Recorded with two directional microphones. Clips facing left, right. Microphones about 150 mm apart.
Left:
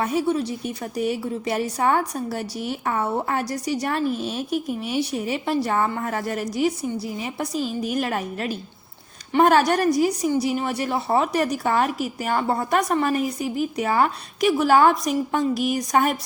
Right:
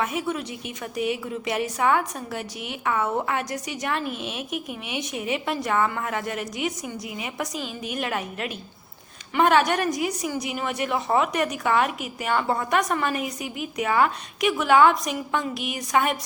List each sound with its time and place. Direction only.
0.0 s a woman's voice: 35° left (ahead or behind)